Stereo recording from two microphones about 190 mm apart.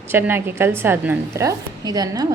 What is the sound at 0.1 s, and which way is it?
A woman's voice, 10° right (ahead or behind).